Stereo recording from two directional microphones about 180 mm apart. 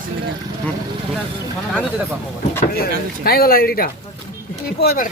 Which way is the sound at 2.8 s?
60° left (ahead or behind).